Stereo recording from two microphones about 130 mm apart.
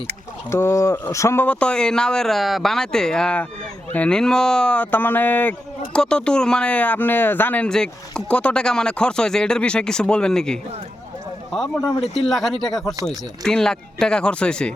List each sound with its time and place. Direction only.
0.5 s speech: 20° left (ahead or behind)